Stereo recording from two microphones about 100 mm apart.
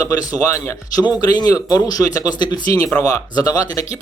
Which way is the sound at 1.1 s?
40° left (ahead or behind).